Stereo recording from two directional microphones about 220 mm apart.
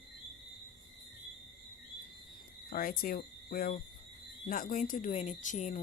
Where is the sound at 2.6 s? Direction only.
40° left (ahead or behind).